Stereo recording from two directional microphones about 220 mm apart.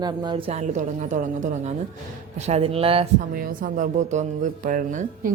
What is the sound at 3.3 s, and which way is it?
Speech, 40° right (ahead or behind).